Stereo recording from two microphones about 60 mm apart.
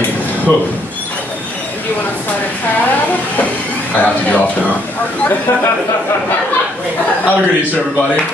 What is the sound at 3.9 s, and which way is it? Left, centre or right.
Speech, left.